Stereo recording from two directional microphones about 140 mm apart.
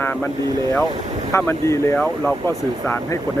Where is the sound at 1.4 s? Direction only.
15° left (ahead or behind).